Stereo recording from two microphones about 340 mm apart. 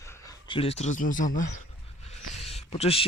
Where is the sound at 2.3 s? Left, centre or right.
Centre.